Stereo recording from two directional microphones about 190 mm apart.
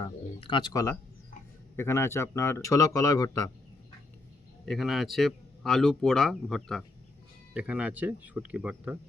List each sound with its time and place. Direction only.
0.0 s speech: 30° left (ahead or behind)
4.6 s speech: centre (ahead or behind)